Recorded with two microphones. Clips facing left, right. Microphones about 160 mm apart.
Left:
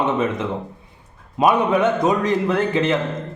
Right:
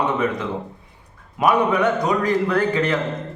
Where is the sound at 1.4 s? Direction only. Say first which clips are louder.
Left 1 dB; 25° left (ahead or behind).